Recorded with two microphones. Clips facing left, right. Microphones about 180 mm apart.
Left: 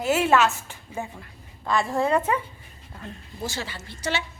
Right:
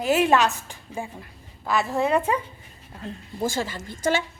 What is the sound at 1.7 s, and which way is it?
Speech, 5° right (ahead or behind).